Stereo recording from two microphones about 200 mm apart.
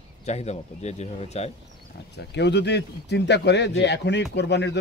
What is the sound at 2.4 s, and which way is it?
A man's voice, 60° left (ahead or behind).